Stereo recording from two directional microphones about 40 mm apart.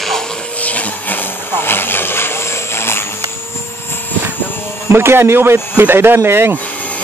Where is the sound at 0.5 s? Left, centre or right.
Left.